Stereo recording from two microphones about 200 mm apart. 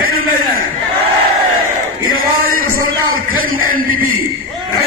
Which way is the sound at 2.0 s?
45° right (ahead or behind).